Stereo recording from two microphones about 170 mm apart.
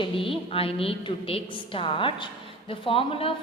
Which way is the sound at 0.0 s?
30° left (ahead or behind).